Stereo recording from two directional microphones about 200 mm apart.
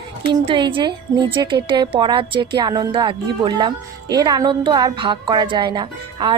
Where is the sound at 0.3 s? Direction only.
25° right (ahead or behind).